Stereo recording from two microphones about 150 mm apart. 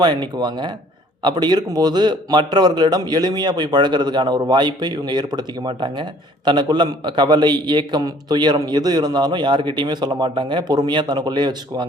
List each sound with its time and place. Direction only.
0.0 s a man's voice: 30° right (ahead or behind)